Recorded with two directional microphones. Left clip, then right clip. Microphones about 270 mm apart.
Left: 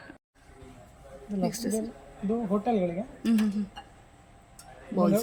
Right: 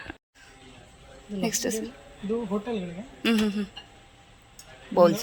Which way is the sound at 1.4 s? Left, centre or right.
Centre.